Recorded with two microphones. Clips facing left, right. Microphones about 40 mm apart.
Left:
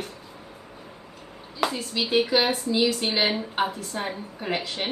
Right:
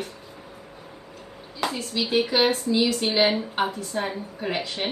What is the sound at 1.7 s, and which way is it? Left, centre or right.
A woman's voice, centre.